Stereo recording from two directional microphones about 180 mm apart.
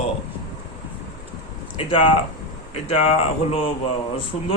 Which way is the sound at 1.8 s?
30° left (ahead or behind).